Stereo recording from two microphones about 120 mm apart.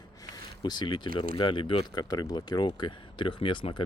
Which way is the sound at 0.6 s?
40° left (ahead or behind).